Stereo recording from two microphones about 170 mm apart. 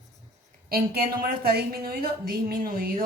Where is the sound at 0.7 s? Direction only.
60° right (ahead or behind).